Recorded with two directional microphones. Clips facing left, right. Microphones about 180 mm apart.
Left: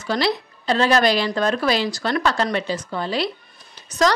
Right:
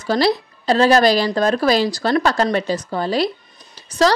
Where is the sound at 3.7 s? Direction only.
30° right (ahead or behind).